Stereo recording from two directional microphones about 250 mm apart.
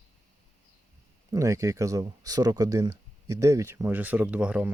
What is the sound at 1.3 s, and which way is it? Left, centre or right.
Speech, centre.